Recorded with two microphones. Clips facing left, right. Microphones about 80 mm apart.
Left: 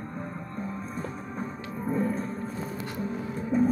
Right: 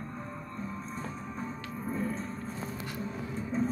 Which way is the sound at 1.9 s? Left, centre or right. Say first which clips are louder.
Left 6 dB; left.